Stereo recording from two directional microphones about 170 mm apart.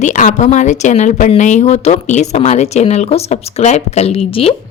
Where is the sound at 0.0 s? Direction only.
45° left (ahead or behind).